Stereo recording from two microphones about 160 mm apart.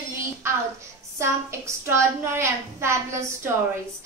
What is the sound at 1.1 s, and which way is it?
A woman's voice, 15° right (ahead or behind).